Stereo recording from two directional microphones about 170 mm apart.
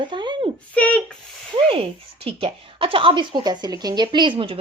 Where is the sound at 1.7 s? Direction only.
35° right (ahead or behind).